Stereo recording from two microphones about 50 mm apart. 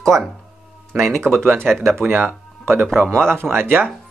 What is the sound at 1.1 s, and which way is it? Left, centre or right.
Speech, right.